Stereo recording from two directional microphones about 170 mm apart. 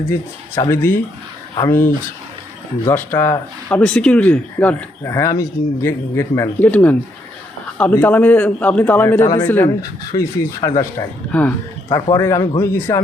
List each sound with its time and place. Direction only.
0.1 s speech: 15° left (ahead or behind)
2.8 s speech: 15° left (ahead or behind)
11.3 s speech: 10° left (ahead or behind)
11.9 s speech: 20° left (ahead or behind)